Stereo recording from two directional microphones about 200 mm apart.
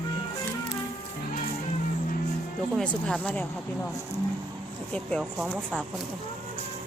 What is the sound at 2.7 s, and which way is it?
Speech, 5° left (ahead or behind).